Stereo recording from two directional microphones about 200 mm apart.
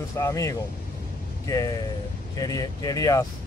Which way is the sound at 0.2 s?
15° left (ahead or behind).